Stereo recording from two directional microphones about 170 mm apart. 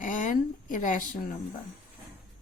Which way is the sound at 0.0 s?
50° left (ahead or behind).